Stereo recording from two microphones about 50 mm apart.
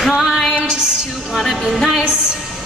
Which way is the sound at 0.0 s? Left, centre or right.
Centre.